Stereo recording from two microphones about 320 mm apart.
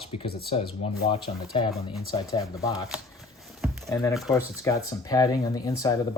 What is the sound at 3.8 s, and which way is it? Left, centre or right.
Speech, centre.